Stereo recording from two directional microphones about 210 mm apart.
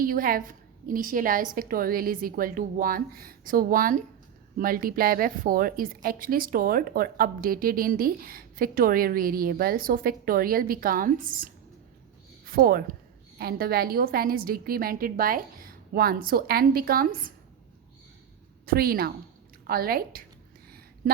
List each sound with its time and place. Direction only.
0.0 s a woman's voice: 40° right (ahead or behind)
12.5 s a woman's voice: 45° right (ahead or behind)
18.6 s a woman's voice: 45° right (ahead or behind)